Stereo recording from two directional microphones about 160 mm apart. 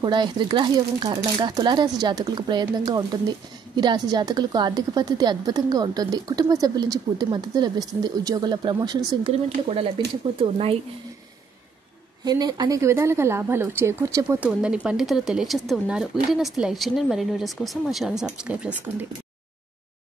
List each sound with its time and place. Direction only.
0.0 s speech: 30° right (ahead or behind)
12.3 s speech: 25° right (ahead or behind)
14.4 s speech: 5° right (ahead or behind)